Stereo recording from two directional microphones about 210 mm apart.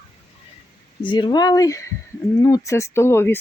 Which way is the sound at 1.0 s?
20° left (ahead or behind).